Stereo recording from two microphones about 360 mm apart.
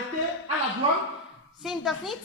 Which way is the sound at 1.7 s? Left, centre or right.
Centre.